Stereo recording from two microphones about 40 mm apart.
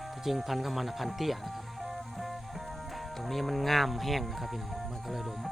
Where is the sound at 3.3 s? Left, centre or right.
Centre.